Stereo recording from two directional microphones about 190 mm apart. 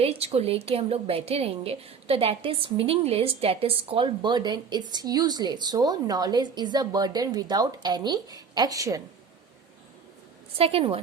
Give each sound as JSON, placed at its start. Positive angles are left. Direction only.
{"t": 0.0, "sound": "a woman's voice", "side_deg": -30}
{"t": 10.6, "sound": "a woman's voice", "side_deg": -30}